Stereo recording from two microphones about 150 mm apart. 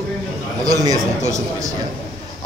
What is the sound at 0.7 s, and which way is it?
Speech, 25° right (ahead or behind).